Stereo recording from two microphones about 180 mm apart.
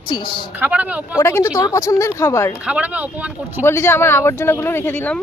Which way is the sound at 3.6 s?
15° left (ahead or behind).